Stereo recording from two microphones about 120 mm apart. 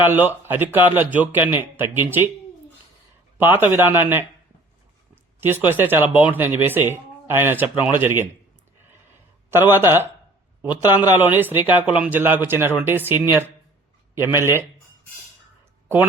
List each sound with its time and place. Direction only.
0.0 s speech: 15° right (ahead or behind)
3.3 s speech: 15° right (ahead or behind)
5.4 s speech: 15° right (ahead or behind)
9.5 s speech: 20° right (ahead or behind)